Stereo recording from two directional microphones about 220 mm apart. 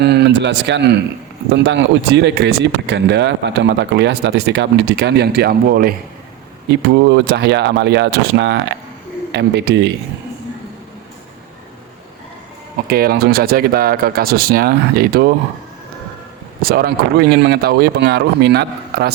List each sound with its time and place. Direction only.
0.0 s speech: 50° right (ahead or behind)
12.9 s speech: 45° right (ahead or behind)
16.6 s speech: 45° right (ahead or behind)